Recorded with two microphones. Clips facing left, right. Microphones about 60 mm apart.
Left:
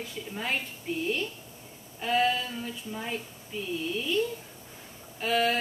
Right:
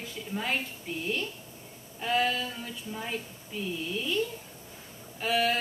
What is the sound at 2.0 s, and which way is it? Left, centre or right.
A woman's voice, centre.